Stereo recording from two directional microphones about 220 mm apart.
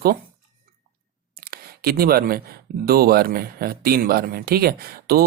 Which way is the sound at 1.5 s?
45° right (ahead or behind).